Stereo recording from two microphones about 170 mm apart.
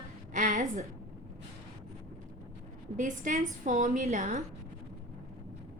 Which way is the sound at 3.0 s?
50° right (ahead or behind).